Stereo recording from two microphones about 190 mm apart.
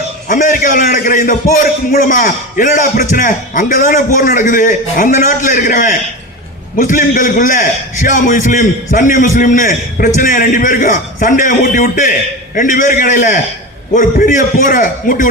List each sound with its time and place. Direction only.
0.3 s a man's voice: 40° left (ahead or behind)